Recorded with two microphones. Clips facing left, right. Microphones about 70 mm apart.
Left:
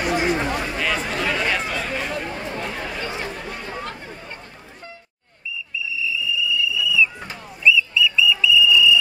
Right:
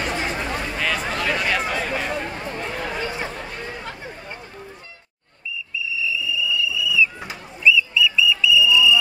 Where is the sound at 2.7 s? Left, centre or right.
Centre.